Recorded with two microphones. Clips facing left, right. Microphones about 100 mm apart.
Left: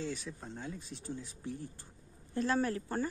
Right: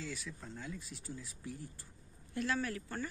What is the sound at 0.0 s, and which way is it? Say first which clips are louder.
Speech: left 5 dB; 25° left (ahead or behind).